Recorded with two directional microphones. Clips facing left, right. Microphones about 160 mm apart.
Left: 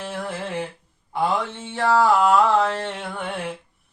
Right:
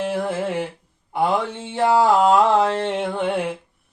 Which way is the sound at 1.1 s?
15° right (ahead or behind).